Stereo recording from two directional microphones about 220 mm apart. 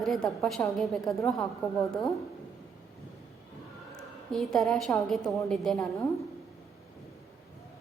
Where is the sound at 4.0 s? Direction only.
Centre (ahead or behind).